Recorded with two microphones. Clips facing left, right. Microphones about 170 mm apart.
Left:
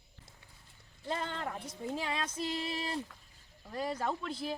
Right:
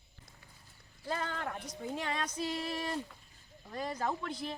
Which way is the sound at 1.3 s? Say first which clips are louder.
Even; centre (ahead or behind).